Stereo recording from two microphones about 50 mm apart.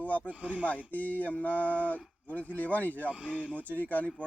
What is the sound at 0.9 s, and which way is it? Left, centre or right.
Mantra, left.